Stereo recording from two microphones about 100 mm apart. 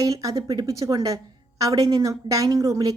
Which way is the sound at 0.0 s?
35° right (ahead or behind).